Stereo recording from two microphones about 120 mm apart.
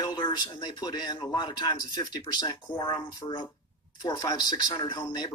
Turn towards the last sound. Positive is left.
turn(degrees=35)  # may be behind; listen again after turning